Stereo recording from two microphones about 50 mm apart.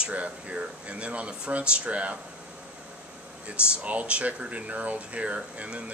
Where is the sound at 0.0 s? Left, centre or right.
Right.